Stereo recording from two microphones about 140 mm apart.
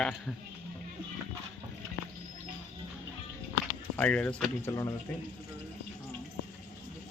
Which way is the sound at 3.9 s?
10° left (ahead or behind).